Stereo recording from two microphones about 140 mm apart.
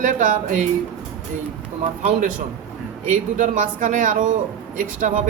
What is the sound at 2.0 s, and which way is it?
Speech, 65° right (ahead or behind).